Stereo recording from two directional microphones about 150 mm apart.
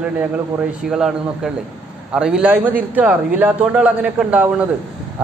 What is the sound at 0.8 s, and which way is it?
A man's voice, 5° right (ahead or behind).